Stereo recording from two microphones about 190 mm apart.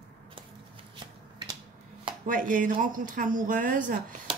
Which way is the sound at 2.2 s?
45° right (ahead or behind).